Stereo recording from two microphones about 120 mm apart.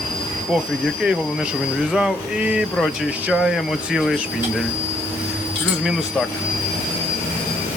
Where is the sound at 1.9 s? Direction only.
10° right (ahead or behind).